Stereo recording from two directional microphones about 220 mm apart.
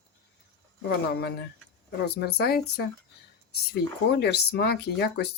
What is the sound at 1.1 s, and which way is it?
Speech, 45° left (ahead or behind).